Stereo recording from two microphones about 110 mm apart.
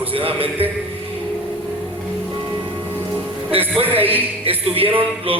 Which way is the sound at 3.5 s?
60° right (ahead or behind).